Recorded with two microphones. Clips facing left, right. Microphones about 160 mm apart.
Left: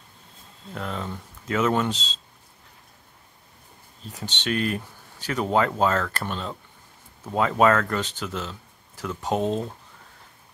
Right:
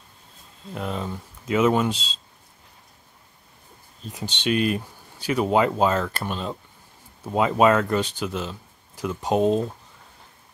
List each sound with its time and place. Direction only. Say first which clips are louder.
0.7 s speech: right 2 dB; 15° right (ahead or behind)
4.1 s speech: right 3 dB; 15° right (ahead or behind)